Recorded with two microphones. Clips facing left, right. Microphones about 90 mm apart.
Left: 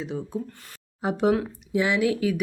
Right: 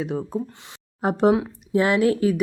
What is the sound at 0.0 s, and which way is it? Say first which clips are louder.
Speech: right 5 dB; 55° right (ahead or behind).